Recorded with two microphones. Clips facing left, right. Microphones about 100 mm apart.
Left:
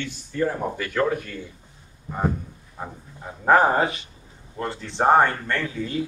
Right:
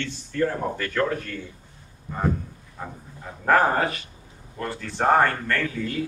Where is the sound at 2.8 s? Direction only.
20° left (ahead or behind).